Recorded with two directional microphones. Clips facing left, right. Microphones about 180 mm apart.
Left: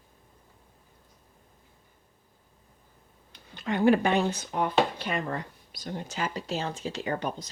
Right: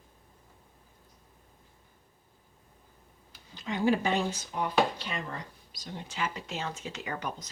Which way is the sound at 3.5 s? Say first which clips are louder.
Left 5 dB; 60° left (ahead or behind).